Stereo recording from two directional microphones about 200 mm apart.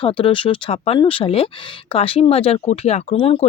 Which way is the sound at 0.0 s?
25° left (ahead or behind).